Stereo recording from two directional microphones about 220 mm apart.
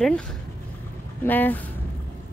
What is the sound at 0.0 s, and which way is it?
A woman's voice, 5° left (ahead or behind).